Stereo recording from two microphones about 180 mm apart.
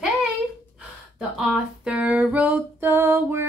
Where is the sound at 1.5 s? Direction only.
5° right (ahead or behind).